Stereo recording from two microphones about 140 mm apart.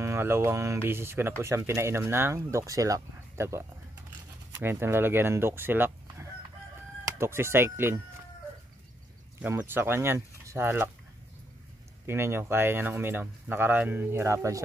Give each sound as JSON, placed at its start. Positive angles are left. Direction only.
{"t": 0.0, "sound": "speech", "side_deg": -20}
{"t": 9.6, "sound": "speech", "side_deg": -15}
{"t": 12.1, "sound": "speech", "side_deg": -15}